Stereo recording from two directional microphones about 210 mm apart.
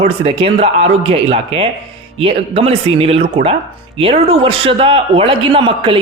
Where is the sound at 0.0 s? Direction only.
30° right (ahead or behind).